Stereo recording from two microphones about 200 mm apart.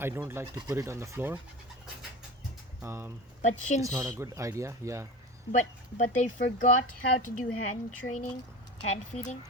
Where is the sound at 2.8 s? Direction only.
10° right (ahead or behind).